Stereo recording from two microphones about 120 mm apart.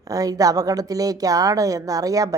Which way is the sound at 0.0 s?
30° right (ahead or behind).